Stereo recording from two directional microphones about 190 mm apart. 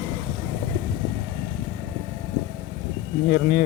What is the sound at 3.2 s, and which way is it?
Speech, 40° left (ahead or behind).